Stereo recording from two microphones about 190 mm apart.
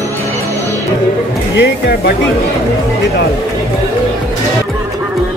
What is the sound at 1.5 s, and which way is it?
Speech, 65° left (ahead or behind).